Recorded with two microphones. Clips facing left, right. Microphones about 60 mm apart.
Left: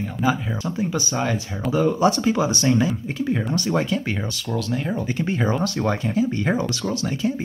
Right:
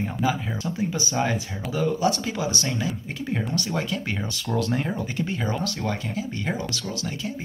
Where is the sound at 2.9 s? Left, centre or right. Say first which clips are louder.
Left 6 dB; centre.